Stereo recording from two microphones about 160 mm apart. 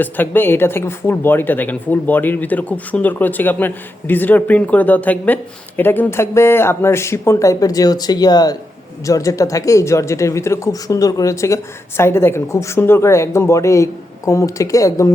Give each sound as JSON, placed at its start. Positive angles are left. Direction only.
{"t": 0.0, "sound": "speech", "side_deg": 10}